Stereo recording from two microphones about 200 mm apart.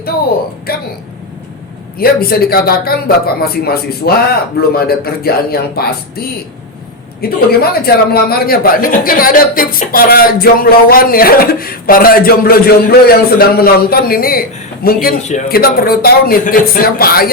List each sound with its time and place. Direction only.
2.0 s a man's voice: 50° left (ahead or behind)